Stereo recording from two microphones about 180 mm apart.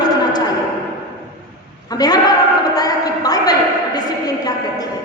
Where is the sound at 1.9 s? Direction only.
20° left (ahead or behind).